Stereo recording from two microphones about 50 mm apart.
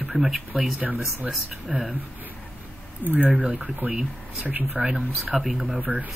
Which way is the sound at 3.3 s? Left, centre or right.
Right.